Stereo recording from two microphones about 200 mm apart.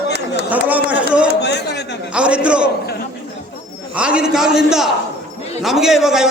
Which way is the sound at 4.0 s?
5° right (ahead or behind).